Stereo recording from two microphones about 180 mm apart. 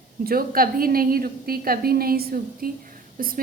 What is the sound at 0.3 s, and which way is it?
A woman's voice, 55° right (ahead or behind).